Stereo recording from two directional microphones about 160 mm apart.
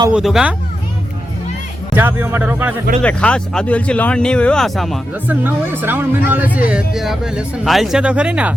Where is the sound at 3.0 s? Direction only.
5° left (ahead or behind).